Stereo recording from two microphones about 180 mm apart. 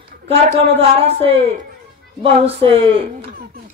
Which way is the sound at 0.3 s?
35° right (ahead or behind).